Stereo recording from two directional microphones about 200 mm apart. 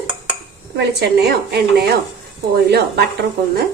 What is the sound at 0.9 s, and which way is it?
A woman's voice, 55° right (ahead or behind).